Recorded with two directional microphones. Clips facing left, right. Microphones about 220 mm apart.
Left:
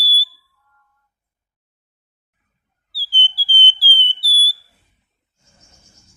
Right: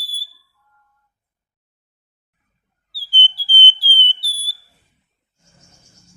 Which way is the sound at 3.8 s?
20° right (ahead or behind).